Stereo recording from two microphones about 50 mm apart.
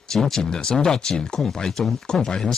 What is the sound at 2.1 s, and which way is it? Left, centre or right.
Speech, centre.